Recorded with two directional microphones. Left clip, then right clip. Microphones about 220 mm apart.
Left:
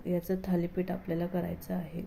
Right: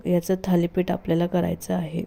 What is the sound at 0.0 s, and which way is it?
Speech, 35° right (ahead or behind).